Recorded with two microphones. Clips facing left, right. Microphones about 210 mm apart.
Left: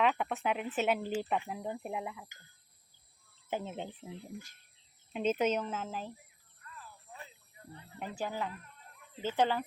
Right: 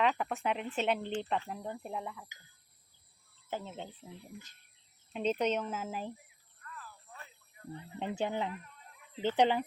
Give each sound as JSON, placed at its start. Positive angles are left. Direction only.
{"t": 0.0, "sound": "speech", "side_deg": 0}
{"t": 3.5, "sound": "speech", "side_deg": 15}
{"t": 5.1, "sound": "speech", "side_deg": 5}
{"t": 6.7, "sound": "a sound", "side_deg": 20}
{"t": 7.8, "sound": "speech", "side_deg": -20}